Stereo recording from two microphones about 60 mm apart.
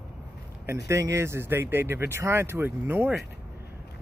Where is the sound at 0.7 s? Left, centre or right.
Right.